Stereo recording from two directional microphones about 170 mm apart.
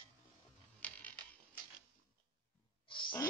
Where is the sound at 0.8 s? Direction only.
10° left (ahead or behind).